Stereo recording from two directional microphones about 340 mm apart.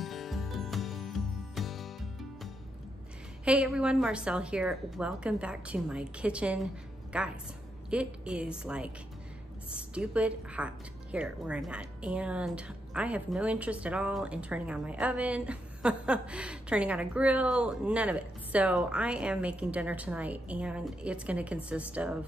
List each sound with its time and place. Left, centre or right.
0.0 s music: centre
3.4 s a woman's voice: centre